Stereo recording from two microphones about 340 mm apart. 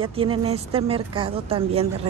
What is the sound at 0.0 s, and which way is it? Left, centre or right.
Speech, centre.